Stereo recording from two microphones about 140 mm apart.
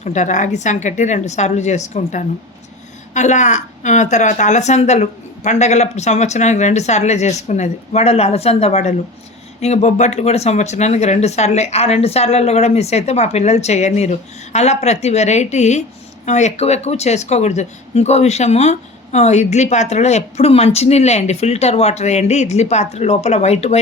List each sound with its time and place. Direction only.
0.0 s a woman's voice: 60° left (ahead or behind)